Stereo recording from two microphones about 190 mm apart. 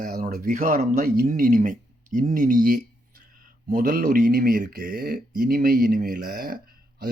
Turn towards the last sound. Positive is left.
turn(degrees=-50)  # may be behind; listen again after turning